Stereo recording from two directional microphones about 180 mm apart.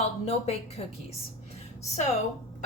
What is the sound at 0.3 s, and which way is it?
Speech, 35° left (ahead or behind).